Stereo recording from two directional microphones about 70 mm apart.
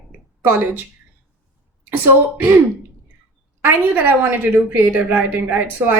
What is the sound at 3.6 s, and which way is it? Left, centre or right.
Speech, right.